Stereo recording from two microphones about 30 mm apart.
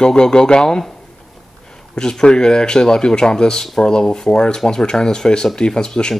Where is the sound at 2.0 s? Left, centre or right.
Left.